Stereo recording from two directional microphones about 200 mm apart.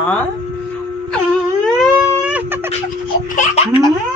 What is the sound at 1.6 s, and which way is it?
Baby cry, centre (ahead or behind).